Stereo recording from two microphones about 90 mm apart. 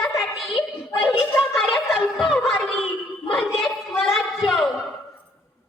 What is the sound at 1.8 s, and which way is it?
Music, centre (ahead or behind).